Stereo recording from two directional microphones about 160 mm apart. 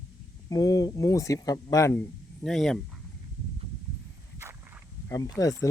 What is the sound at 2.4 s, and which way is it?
Speech, 5° left (ahead or behind).